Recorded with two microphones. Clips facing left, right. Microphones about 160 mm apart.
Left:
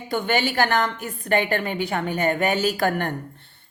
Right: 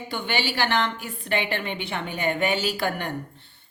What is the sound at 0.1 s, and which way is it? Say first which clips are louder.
A woman's voice: left 6 dB; 45° left (ahead or behind).